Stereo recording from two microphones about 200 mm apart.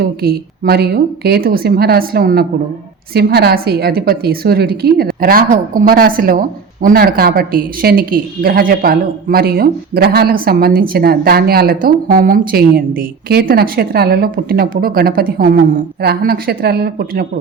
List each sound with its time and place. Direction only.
0.0 s a woman's voice: 50° right (ahead or behind)